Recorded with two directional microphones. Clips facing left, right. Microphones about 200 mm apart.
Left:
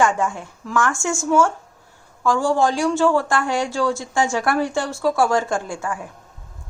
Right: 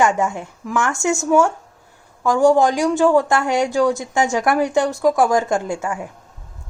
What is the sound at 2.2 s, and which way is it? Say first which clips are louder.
Speech: right 4 dB; 20° right (ahead or behind).